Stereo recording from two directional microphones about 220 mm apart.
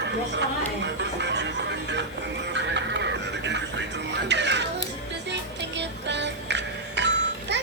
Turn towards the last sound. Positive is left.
turn(degrees=-50)  # may be behind; listen again after turning